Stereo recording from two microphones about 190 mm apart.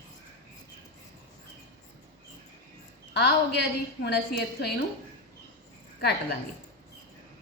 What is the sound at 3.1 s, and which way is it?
A woman's voice, 65° left (ahead or behind).